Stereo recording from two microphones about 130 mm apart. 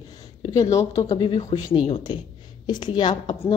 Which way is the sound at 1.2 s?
45° left (ahead or behind).